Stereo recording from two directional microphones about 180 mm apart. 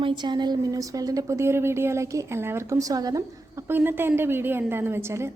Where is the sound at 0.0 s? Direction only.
25° right (ahead or behind).